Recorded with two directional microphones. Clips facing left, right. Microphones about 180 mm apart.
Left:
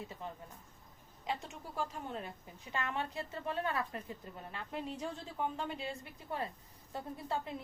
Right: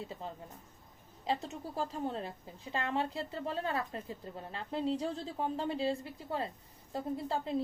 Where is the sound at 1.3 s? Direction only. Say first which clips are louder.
Right 5 dB; 35° right (ahead or behind).